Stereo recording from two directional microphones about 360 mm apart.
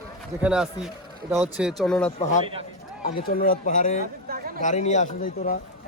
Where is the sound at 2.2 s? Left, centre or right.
Centre.